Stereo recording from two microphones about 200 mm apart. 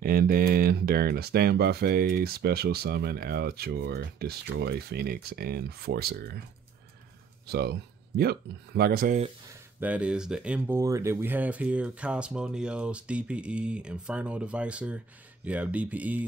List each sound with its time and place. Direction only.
0.0 s speech: 50° right (ahead or behind)
7.4 s speech: 50° right (ahead or behind)
9.5 s speech: 10° right (ahead or behind)